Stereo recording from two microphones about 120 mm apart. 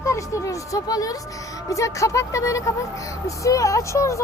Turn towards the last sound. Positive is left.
turn(degrees=25)  # may be behind; listen again after turning